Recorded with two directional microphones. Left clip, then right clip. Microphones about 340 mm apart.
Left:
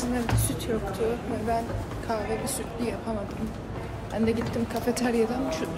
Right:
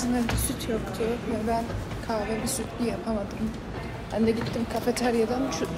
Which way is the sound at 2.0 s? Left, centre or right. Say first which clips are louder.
Even; centre.